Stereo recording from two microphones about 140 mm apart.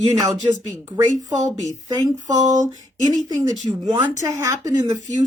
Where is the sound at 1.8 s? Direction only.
25° right (ahead or behind).